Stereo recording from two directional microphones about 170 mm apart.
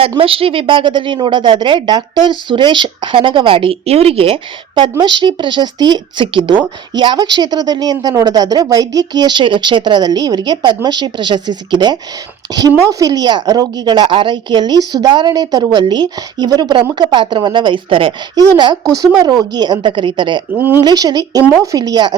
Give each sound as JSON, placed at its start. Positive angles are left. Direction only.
{"t": 0.1, "sound": "a woman's voice", "side_deg": -30}
{"t": 20.6, "sound": "speech", "side_deg": -10}
{"t": 20.8, "sound": "a woman's voice", "side_deg": -25}